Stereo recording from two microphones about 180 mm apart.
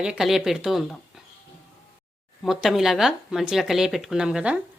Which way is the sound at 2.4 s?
Centre (ahead or behind).